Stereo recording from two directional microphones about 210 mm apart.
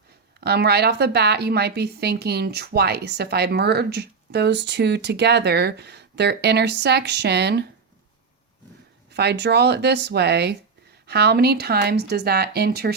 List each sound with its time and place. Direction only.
0.3 s a woman's voice: 50° right (ahead or behind)
9.1 s a woman's voice: 50° right (ahead or behind)